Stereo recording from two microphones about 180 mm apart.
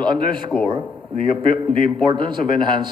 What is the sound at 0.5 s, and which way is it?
Speech, 15° left (ahead or behind).